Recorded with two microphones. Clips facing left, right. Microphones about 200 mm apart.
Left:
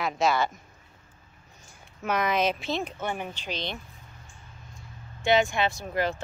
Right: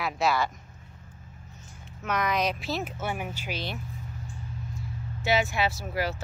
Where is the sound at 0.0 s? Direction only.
Centre (ahead or behind).